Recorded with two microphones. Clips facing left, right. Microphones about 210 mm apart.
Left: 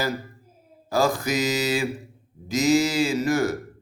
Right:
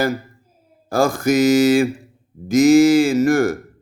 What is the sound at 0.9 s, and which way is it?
Speech, 50° right (ahead or behind).